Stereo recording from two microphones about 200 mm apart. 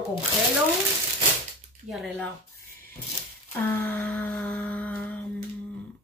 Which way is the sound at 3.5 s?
10° left (ahead or behind).